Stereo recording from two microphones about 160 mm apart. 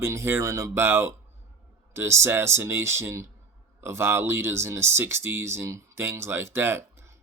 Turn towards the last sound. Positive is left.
turn(degrees=-15)  # may be behind; listen again after turning